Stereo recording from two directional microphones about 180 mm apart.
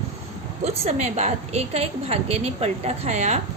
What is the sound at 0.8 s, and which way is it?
A woman's voice, 35° right (ahead or behind).